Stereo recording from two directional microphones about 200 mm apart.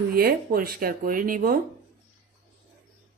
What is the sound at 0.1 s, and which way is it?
Speech, 50° right (ahead or behind).